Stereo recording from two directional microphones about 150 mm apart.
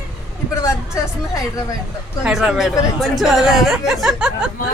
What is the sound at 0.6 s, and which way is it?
A woman's voice, 20° left (ahead or behind).